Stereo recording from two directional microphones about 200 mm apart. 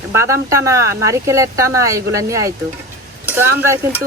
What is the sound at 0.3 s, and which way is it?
Speech, 15° right (ahead or behind).